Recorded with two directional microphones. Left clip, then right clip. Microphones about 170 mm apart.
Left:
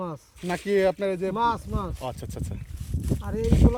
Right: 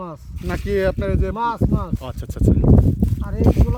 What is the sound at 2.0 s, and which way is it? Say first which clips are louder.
Speech: right 10 dB; 80° right.